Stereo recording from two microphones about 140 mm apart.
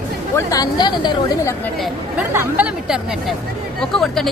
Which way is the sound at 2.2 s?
10° right (ahead or behind).